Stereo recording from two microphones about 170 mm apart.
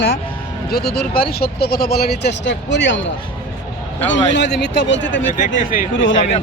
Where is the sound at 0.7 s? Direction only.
70° left (ahead or behind); by 3.0 s 90° left.